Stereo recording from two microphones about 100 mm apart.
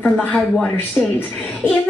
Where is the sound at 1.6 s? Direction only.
20° left (ahead or behind).